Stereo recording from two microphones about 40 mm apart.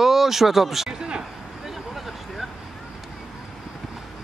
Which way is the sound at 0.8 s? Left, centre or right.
Centre.